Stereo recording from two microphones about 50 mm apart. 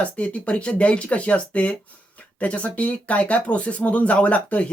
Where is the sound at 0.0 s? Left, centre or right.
Left.